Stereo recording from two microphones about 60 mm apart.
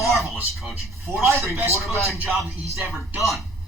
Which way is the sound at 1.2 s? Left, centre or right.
Right.